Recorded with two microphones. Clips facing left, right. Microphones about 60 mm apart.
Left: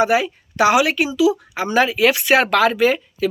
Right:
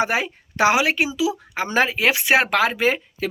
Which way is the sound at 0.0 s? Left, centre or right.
Right.